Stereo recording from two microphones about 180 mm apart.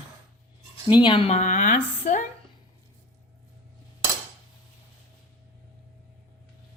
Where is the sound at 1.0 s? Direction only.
30° left (ahead or behind); by 2.2 s 45° left (ahead or behind).